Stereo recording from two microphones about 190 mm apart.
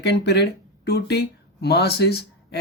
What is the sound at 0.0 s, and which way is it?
Speech, 60° left (ahead or behind).